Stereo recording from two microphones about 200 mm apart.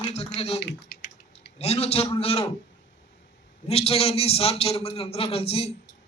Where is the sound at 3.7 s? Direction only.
30° left (ahead or behind).